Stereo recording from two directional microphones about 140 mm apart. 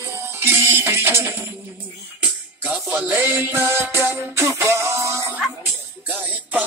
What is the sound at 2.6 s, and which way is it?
Music, 10° right (ahead or behind).